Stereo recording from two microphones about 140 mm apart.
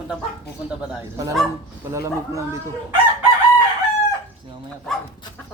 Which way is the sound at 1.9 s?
20° right (ahead or behind).